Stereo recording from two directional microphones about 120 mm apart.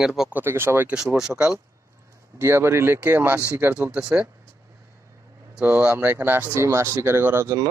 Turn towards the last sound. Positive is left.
turn(degrees=-20)  # may be behind; listen again after turning